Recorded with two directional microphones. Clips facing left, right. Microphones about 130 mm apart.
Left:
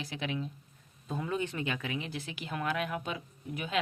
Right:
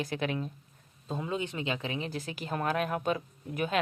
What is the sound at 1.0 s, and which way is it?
Speech, 25° right (ahead or behind).